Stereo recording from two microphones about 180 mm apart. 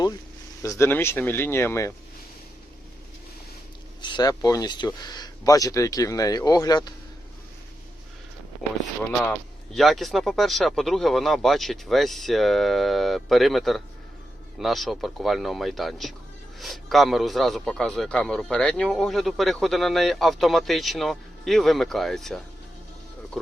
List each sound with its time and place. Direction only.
0.6 s speech: 15° left (ahead or behind)
4.0 s speech: 25° left (ahead or behind)
9.7 s a man's voice: centre (ahead or behind)